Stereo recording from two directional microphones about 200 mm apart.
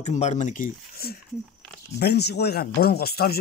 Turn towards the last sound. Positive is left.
turn(degrees=50)  # may be behind; listen again after turning